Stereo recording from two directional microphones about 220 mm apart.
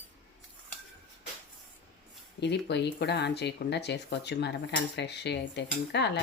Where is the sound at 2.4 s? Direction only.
50° left (ahead or behind).